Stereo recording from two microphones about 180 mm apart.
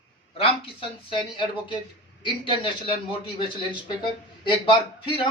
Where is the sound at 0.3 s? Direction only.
30° left (ahead or behind).